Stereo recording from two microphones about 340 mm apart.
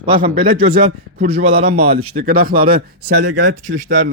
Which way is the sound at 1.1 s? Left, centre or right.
Centre.